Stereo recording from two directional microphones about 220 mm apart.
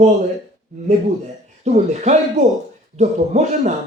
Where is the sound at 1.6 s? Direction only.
30° right (ahead or behind).